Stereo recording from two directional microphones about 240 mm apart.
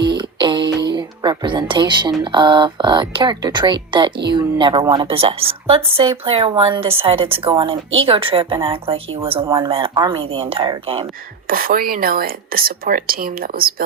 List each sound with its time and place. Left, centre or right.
0.2 s music: centre
0.9 s a sound: centre
2.3 s a woman's voice: centre
11.4 s speech: right